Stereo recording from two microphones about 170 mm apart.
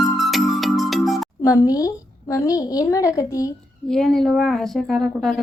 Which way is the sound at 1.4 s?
20° left (ahead or behind).